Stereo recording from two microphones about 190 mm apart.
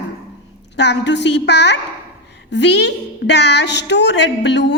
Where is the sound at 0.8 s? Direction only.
65° left (ahead or behind).